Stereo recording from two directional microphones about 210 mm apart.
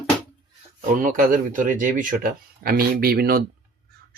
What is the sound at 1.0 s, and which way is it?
Speech, 40° right (ahead or behind).